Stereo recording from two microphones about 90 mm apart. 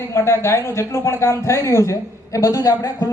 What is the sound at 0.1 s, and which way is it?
Speech, 30° left (ahead or behind).